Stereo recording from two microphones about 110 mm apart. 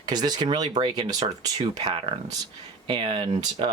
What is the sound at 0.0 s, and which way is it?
Speech, 40° right (ahead or behind).